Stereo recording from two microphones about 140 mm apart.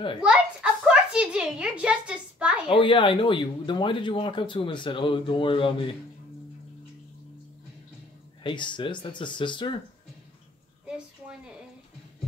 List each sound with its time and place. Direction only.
0.2 s a child's voice: 5° right (ahead or behind)
2.7 s speech: 35° left (ahead or behind)
8.5 s speech: 35° left (ahead or behind)
10.9 s a sound: 5° right (ahead or behind)